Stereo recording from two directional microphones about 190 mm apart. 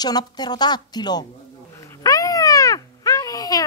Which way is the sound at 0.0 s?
20° left (ahead or behind).